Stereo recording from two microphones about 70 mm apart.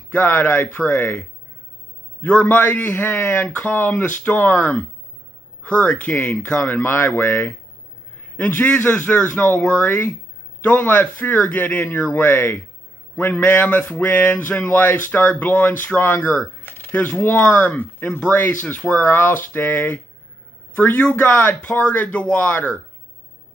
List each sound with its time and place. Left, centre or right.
0.1 s speech: left
2.2 s speech: left
9.8 s speech: left
19.0 s speech: left